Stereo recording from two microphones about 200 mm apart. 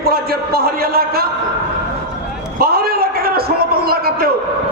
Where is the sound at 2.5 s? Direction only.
50° right (ahead or behind).